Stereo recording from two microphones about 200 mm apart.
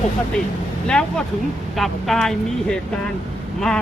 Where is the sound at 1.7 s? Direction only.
Centre (ahead or behind).